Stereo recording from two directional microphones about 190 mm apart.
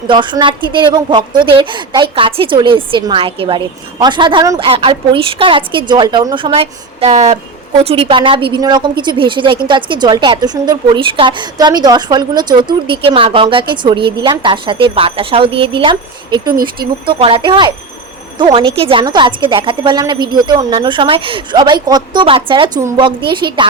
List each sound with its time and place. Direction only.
0.1 s a woman's voice: 25° right (ahead or behind)